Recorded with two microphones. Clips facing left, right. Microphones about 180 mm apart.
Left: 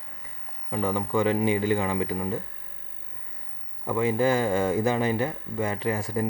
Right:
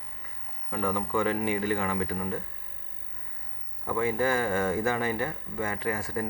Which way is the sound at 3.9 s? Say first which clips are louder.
Left 4 dB; 20° left (ahead or behind).